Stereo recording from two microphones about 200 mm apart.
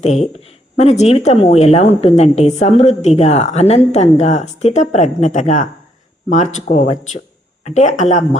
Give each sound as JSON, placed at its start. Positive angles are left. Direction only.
{"t": 0.0, "sound": "speech", "side_deg": 35}